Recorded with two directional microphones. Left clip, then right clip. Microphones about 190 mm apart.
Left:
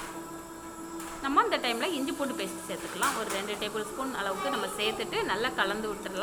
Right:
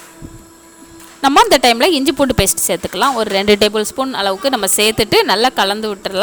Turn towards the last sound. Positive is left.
turn(degrees=-70)  # may be behind; listen again after turning